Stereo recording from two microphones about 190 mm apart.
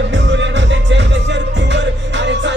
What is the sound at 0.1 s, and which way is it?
Music, 70° right (ahead or behind).